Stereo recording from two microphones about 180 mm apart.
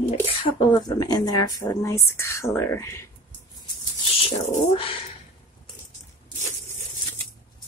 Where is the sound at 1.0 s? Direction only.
20° left (ahead or behind).